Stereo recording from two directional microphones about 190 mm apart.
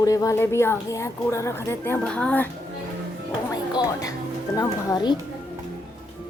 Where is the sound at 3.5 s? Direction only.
20° left (ahead or behind).